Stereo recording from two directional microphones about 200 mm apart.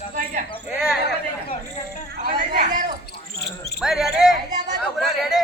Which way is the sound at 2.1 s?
45° right (ahead or behind).